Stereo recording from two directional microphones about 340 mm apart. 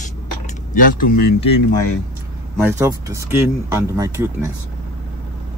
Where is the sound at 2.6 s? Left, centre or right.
Centre.